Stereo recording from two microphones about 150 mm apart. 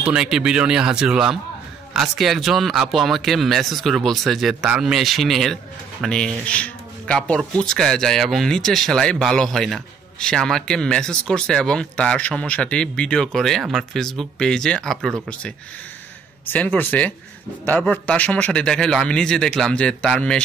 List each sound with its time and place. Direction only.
0.0 s speech: 5° right (ahead or behind)
16.4 s a man's voice: 15° left (ahead or behind)